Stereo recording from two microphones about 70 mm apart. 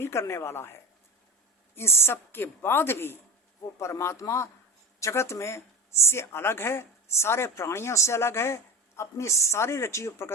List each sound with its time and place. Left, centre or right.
0.0 s a woman's voice: left
3.8 s a woman's voice: left